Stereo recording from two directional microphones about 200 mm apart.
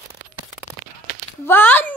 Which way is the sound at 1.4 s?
10° left (ahead or behind).